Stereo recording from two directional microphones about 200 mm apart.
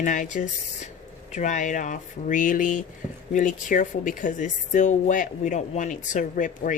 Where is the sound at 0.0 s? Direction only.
40° left (ahead or behind).